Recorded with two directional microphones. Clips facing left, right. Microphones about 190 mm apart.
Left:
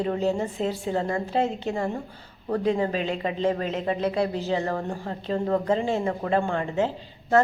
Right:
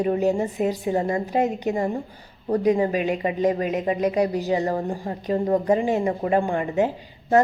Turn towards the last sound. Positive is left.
turn(degrees=-15)  # may be behind; listen again after turning